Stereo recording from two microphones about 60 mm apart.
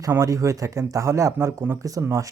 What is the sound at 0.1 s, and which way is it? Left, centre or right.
Speech, right.